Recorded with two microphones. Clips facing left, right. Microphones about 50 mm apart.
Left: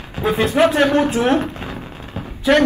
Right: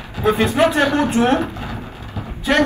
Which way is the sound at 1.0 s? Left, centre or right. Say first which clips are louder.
Even; right.